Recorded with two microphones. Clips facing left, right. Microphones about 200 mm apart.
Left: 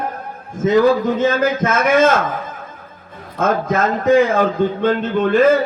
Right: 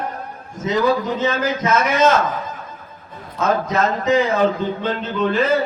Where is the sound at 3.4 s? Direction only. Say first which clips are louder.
Left 2 dB; 50° left (ahead or behind).